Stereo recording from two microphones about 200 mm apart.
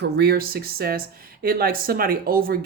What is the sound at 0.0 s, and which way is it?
Speech, 55° right (ahead or behind).